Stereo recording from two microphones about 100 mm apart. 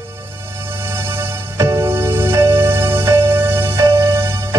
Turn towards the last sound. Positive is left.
turn(degrees=-25)  # may be behind; listen again after turning